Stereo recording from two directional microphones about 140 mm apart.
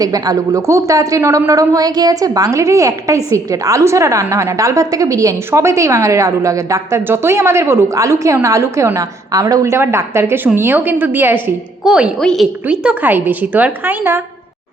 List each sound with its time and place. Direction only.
0.0 s a woman's voice: 25° right (ahead or behind); by 12.1 s 5° right (ahead or behind)
12.2 s a woman's voice: 5° left (ahead or behind)
12.6 s a woman's voice: 5° right (ahead or behind)